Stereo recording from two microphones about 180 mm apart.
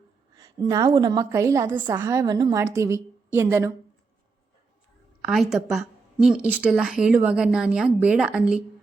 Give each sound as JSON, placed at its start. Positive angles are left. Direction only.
{"t": 0.3, "sound": "a sound", "side_deg": -20}
{"t": 0.9, "sound": "a woman's voice", "side_deg": -25}
{"t": 5.2, "sound": "a woman's voice", "side_deg": 0}